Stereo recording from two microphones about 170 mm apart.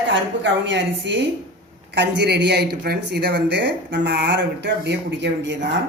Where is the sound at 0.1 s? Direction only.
90° right.